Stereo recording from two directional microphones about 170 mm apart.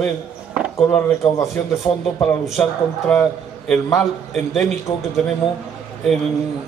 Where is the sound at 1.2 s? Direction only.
20° left (ahead or behind).